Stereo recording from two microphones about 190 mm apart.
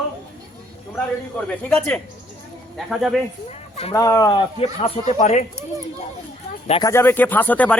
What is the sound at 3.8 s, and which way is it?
Speech, 20° left (ahead or behind).